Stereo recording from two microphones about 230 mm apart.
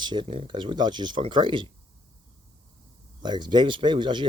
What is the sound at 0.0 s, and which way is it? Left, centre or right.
Speech, centre.